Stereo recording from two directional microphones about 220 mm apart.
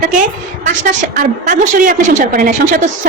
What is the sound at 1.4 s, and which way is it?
A woman's voice, 35° right (ahead or behind).